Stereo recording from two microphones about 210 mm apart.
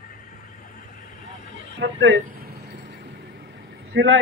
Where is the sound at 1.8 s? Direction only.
60° right (ahead or behind).